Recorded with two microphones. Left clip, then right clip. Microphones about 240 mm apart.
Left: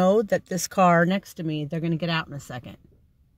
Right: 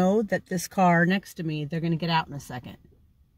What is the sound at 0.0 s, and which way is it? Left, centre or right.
Speech, left.